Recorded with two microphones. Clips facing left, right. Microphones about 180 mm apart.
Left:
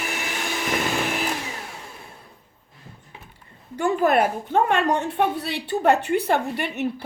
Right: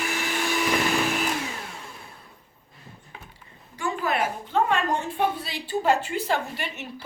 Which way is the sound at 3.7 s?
60° left (ahead or behind).